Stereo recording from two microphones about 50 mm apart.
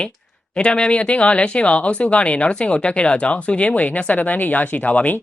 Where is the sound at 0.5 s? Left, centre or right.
Left.